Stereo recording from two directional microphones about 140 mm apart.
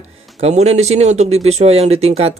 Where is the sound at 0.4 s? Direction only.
50° right (ahead or behind).